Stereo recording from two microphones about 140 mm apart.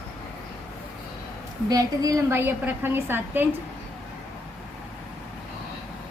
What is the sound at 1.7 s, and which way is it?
A woman's voice, 25° right (ahead or behind).